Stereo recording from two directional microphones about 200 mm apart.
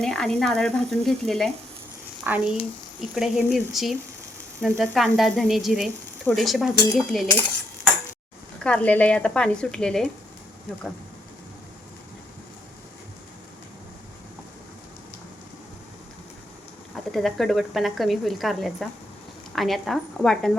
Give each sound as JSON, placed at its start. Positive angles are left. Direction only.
{"t": 0.0, "sound": "speech", "side_deg": 5}
{"t": 2.2, "sound": "speech", "side_deg": -10}
{"t": 8.6, "sound": "speech", "side_deg": 5}
{"t": 16.9, "sound": "speech", "side_deg": 0}